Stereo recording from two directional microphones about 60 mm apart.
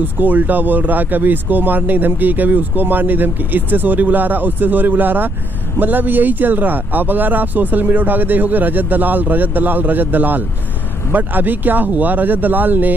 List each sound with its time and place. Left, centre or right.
0.0 s speech: right